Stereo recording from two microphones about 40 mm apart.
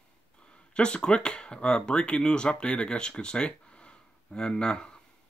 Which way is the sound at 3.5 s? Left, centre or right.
Left.